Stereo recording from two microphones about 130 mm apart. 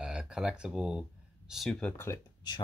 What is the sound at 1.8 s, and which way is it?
Speech, 20° left (ahead or behind).